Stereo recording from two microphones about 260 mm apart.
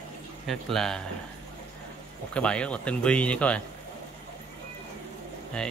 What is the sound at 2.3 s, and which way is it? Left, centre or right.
Speech, centre.